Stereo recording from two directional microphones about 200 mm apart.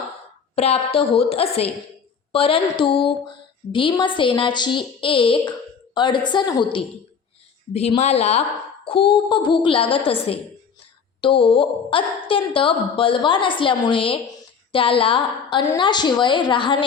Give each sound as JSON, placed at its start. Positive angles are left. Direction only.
{"t": 0.5, "sound": "a woman's voice", "side_deg": 30}